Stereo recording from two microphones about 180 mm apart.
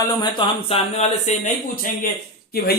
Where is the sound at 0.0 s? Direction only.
25° left (ahead or behind).